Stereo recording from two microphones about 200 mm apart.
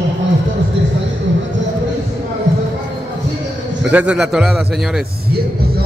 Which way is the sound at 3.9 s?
5° right (ahead or behind).